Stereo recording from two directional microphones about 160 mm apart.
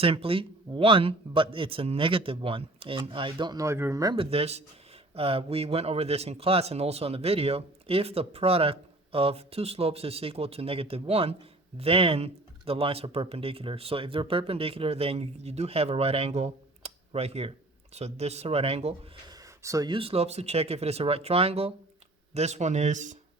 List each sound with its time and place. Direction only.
0.0 s speech: 35° right (ahead or behind)
4.3 s speech: 40° right (ahead or behind)
19.3 s speech: 20° right (ahead or behind); by 23.1 s 50° right (ahead or behind)